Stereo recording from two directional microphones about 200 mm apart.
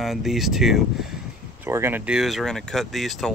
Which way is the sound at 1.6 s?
10° right (ahead or behind).